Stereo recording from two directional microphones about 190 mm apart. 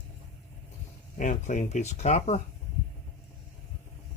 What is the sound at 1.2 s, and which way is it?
Speech, 40° left (ahead or behind).